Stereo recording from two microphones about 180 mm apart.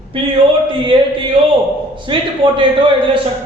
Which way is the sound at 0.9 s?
30° right (ahead or behind).